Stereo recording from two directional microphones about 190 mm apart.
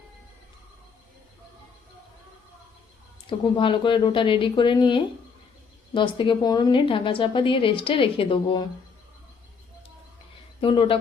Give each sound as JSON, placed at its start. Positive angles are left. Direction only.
{"t": 3.2, "sound": "a woman's voice", "side_deg": 25}
{"t": 10.6, "sound": "a woman's voice", "side_deg": 25}